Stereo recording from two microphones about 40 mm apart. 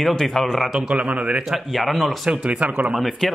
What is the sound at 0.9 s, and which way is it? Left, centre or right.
Speech, right.